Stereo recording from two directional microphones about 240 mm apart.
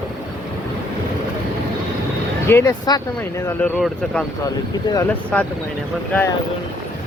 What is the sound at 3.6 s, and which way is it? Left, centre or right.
Speech, centre.